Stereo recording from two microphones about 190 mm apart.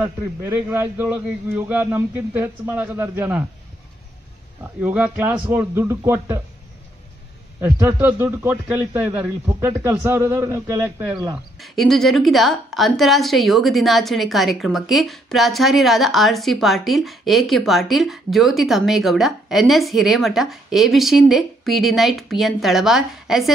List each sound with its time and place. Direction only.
0.0 s a man's voice: 10° right (ahead or behind)
4.8 s a man's voice: 10° right (ahead or behind)
7.6 s a man's voice: 10° right (ahead or behind)
11.6 s a woman's voice: centre (ahead or behind)